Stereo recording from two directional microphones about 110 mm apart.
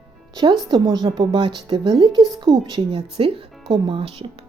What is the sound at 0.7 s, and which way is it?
A woman's voice, 40° right (ahead or behind).